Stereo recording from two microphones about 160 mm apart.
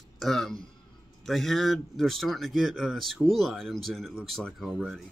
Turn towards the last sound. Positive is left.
turn(degrees=5)  # may be behind; listen again after turning